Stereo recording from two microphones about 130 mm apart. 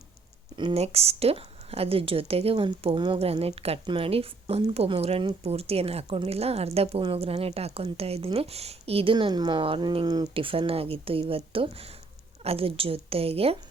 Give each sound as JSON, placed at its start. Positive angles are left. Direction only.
{"t": 0.5, "sound": "speech", "side_deg": -40}
{"t": 0.8, "sound": "speech", "side_deg": -50}
{"t": 9.1, "sound": "speech", "side_deg": -35}